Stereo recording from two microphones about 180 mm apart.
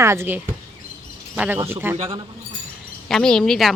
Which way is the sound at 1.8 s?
10° right (ahead or behind).